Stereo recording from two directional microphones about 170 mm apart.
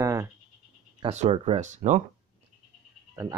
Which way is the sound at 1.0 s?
40° right (ahead or behind).